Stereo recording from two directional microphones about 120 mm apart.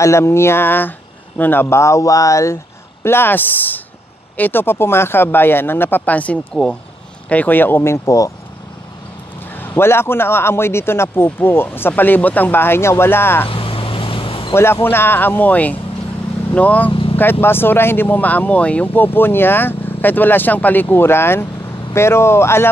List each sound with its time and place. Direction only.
0.0 s a man's voice: 25° left (ahead or behind)
9.6 s a man's voice: 20° left (ahead or behind)
13.5 s a sound: 45° left (ahead or behind)
14.5 s speech: 20° left (ahead or behind)
16.9 s vehicle: 50° left (ahead or behind)
17.2 s a man's voice: 20° left (ahead or behind)